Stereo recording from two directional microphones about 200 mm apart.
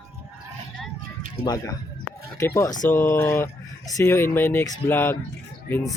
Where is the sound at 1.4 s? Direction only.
20° left (ahead or behind).